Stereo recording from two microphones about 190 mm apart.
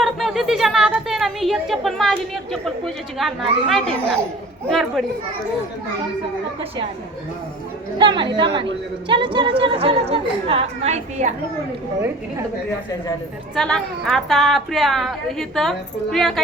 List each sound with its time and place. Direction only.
0.0 s speech: centre (ahead or behind)
7.9 s a woman's voice: 25° right (ahead or behind)
13.6 s speech: 5° left (ahead or behind)